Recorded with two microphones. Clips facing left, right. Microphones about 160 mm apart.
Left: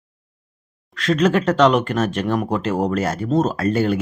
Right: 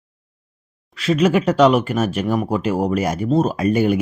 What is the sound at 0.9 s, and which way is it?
Speech, 10° right (ahead or behind).